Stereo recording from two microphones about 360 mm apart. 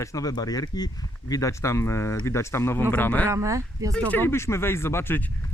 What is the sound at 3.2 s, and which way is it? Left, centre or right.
Speech, centre.